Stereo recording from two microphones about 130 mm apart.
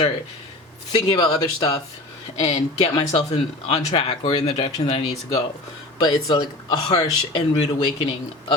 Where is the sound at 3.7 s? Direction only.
50° left (ahead or behind).